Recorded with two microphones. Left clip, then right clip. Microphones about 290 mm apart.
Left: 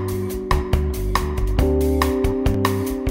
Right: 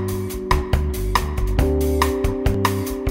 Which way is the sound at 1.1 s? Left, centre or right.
Centre.